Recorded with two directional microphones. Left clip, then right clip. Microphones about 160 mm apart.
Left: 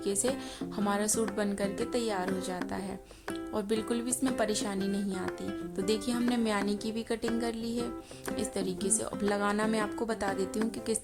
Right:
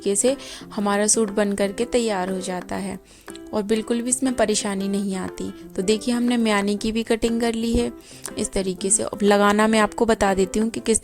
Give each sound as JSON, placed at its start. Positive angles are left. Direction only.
{"t": 0.0, "sound": "speech", "side_deg": -50}